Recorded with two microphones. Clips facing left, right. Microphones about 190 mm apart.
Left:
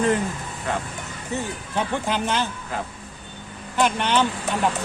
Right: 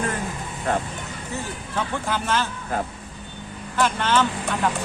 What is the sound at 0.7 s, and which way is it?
Speech, 50° right (ahead or behind).